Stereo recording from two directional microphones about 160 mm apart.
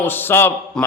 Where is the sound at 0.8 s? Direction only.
5° left (ahead or behind).